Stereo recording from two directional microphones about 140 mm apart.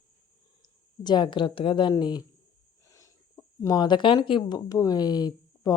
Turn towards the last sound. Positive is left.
turn(degrees=30)  # may be behind; listen again after turning